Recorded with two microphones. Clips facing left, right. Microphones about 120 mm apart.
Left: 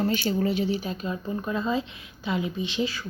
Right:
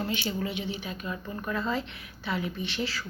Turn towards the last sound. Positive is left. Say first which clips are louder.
# left 5 dB
turn(degrees=15)  # may be behind; listen again after turning